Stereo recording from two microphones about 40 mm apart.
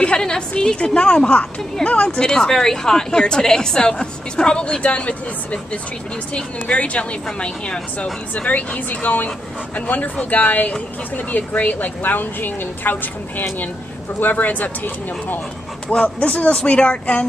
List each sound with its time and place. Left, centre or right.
0.0 s a woman's voice: left
14.2 s a woman's voice: left
15.9 s a woman's voice: left